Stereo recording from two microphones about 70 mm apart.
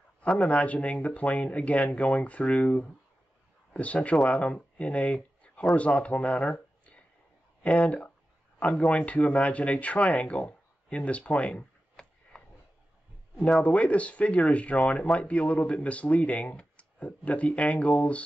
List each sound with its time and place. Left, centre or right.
0.2 s speech: centre
13.6 s speech: centre